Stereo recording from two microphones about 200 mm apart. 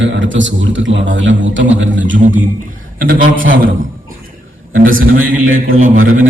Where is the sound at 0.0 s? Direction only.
65° right (ahead or behind).